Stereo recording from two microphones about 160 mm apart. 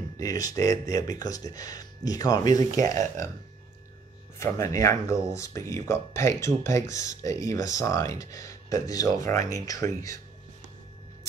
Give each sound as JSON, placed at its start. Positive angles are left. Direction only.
{"t": 0.2, "sound": "speech", "side_deg": 20}
{"t": 4.4, "sound": "speech", "side_deg": 20}